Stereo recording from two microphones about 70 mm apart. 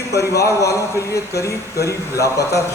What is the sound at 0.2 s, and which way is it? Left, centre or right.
A man's voice, left.